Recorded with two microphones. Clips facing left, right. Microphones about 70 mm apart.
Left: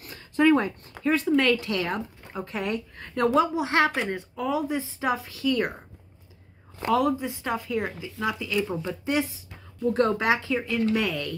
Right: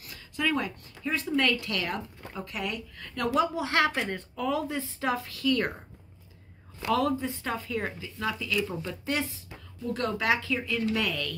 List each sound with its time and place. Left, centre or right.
0.0 s a sound: left
1.2 s speech: left
6.9 s speech: centre